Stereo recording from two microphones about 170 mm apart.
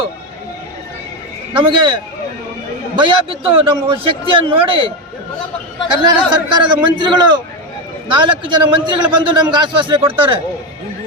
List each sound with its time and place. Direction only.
1.5 s a man's voice: 25° right (ahead or behind)
6.0 s a man's voice: 25° right (ahead or behind)